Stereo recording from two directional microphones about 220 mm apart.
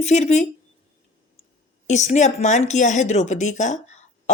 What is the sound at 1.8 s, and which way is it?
Speech, 30° left (ahead or behind).